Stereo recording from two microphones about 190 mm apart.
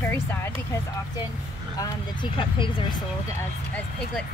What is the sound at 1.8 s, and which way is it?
Speech, 25° left (ahead or behind).